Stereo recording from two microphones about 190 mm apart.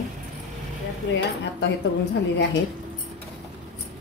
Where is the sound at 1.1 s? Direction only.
70° left (ahead or behind).